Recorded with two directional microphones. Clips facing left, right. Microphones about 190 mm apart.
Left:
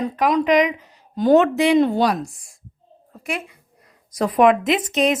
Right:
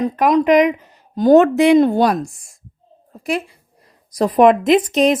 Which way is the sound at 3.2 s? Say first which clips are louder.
Right 6 dB; 35° right (ahead or behind).